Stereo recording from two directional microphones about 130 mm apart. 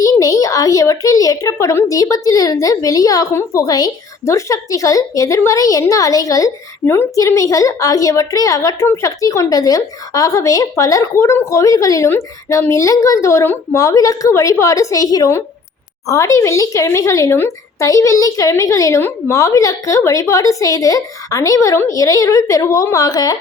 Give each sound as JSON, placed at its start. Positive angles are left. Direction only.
{"t": 0.0, "sound": "a woman's voice", "side_deg": 30}